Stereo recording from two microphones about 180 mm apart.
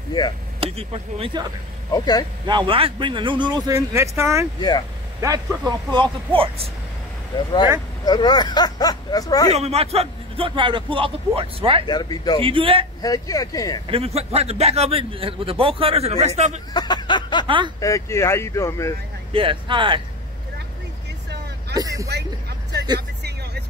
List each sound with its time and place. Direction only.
0.6 s a man's voice: 35° right (ahead or behind); by 4.5 s 15° right (ahead or behind)
4.6 s speech: 25° left (ahead or behind)
5.7 s a man's voice: 25° right (ahead or behind)
7.3 s speech: 25° left (ahead or behind)
9.5 s a man's voice: 35° right (ahead or behind)
11.9 s speech: 25° left (ahead or behind)
12.4 s a man's voice: 30° right (ahead or behind)
13.0 s speech: 20° left (ahead or behind)
13.8 s a man's voice: 35° right (ahead or behind)
16.7 s a sound: 25° left (ahead or behind)
17.7 s speech: 15° left (ahead or behind)
19.3 s a man's voice: 30° right (ahead or behind)
21.7 s a man's voice: 20° right (ahead or behind)